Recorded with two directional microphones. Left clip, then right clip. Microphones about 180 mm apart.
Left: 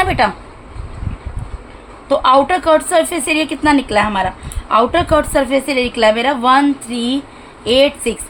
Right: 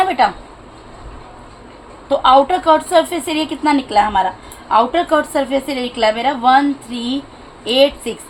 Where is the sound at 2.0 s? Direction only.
35° left (ahead or behind).